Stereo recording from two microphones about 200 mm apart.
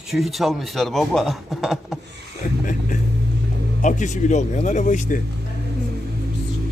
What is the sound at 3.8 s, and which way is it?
Speech, 35° left (ahead or behind).